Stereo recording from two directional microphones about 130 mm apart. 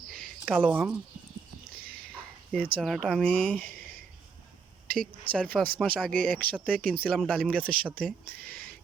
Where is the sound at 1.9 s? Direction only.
10° left (ahead or behind).